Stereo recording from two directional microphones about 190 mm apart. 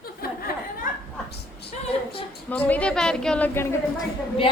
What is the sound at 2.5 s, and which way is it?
A woman's voice, 5° left (ahead or behind).